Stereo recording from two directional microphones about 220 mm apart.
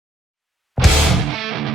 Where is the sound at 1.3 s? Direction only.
Centre (ahead or behind).